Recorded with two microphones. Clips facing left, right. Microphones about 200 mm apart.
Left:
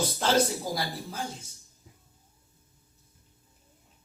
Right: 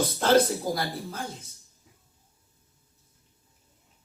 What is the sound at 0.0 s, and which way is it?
Speech, 55° right (ahead or behind).